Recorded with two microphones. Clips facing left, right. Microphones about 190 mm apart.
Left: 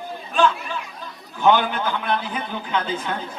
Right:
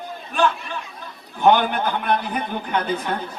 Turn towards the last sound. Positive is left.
turn(degrees=-55)  # may be behind; listen again after turning